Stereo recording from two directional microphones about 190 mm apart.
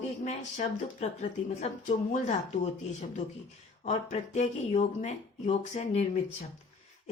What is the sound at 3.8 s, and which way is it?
Speech, 40° left (ahead or behind).